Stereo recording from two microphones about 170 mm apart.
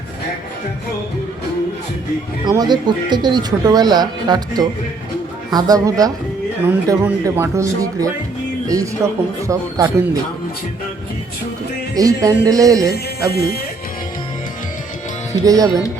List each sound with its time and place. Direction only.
2.4 s speech: 25° right (ahead or behind)
8.6 s music: 20° right (ahead or behind)
9.5 s speech: 20° right (ahead or behind)
11.9 s speech: 20° right (ahead or behind)
15.3 s speech: 20° right (ahead or behind)